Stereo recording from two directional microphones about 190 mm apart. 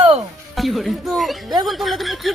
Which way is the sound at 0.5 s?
Centre (ahead or behind).